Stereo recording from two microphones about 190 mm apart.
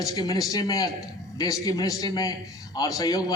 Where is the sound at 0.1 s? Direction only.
20° left (ahead or behind).